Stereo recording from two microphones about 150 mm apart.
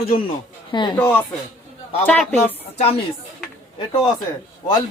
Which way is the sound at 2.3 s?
45° left (ahead or behind).